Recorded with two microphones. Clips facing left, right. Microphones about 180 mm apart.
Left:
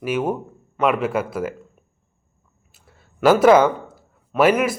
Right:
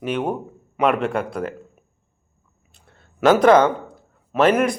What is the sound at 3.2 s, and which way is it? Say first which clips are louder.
A man's voice: even; 5° left (ahead or behind).